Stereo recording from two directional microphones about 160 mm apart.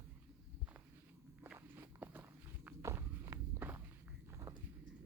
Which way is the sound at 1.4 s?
10° right (ahead or behind).